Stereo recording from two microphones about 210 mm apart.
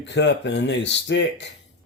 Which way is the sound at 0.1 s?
55° left (ahead or behind).